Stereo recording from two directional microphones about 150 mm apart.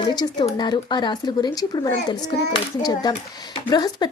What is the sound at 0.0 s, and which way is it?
Speech, 30° left (ahead or behind).